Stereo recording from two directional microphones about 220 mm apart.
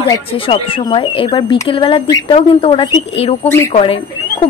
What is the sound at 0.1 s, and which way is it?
Speech, 25° left (ahead or behind).